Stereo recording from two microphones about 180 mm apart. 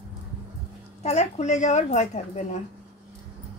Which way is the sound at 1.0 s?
40° left (ahead or behind).